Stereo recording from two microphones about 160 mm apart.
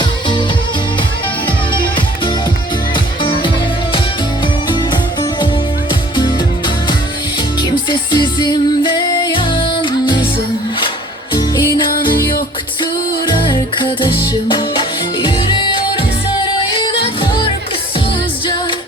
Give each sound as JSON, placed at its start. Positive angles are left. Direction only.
{"t": 0.0, "sound": "music", "side_deg": 30}
{"t": 1.7, "sound": "music", "side_deg": 30}
{"t": 4.7, "sound": "music", "side_deg": 30}
{"t": 7.9, "sound": "music", "side_deg": 30}
{"t": 11.3, "sound": "music", "side_deg": 25}